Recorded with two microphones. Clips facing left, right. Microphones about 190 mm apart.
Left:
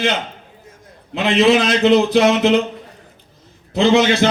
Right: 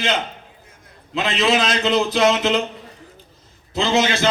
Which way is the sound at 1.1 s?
60° left (ahead or behind).